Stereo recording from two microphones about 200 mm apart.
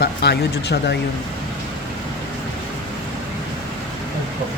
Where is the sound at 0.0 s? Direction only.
55° left (ahead or behind).